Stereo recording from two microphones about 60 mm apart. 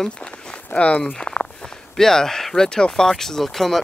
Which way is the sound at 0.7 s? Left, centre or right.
Left.